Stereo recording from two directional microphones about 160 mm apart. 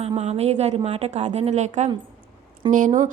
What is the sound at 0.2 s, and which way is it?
A woman's voice, 40° right (ahead or behind).